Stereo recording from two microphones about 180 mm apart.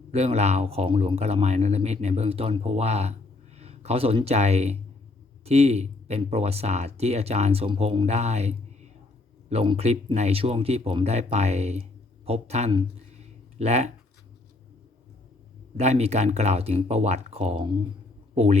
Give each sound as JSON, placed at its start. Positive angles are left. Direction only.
{"t": 0.1, "sound": "speech", "side_deg": -35}
{"t": 15.8, "sound": "speech", "side_deg": -35}